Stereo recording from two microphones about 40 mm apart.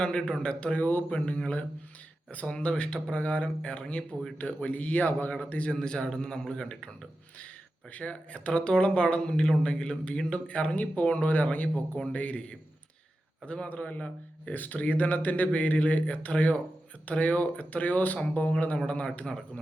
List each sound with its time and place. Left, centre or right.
0.0 s speech: left
2.5 s speech: left
5.7 s speech: left
7.3 s speech: left
13.4 s a man's voice: left
14.5 s speech: left
18.9 s speech: left